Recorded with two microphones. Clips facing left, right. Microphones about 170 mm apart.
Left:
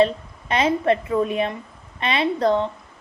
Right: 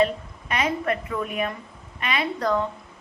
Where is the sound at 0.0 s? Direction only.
30° left (ahead or behind).